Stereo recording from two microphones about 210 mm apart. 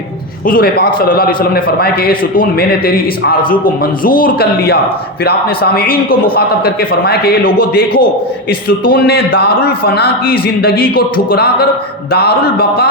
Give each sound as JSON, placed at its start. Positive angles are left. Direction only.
{"t": 0.4, "sound": "a man's voice", "side_deg": 45}